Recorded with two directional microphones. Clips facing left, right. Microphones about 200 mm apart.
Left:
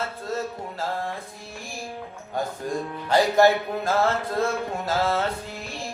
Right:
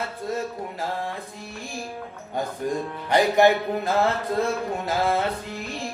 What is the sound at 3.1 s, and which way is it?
Music, 15° right (ahead or behind).